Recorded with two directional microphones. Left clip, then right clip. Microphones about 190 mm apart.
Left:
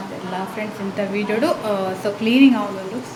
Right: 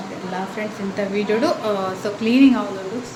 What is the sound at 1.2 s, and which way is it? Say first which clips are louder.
Speech: right 1 dB; centre (ahead or behind).